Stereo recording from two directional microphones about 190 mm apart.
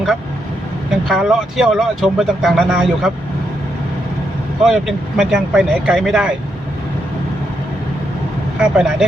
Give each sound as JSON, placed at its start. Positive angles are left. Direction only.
{"t": 1.0, "sound": "speech", "side_deg": 0}
{"t": 4.6, "sound": "speech", "side_deg": 0}
{"t": 8.6, "sound": "speech", "side_deg": -5}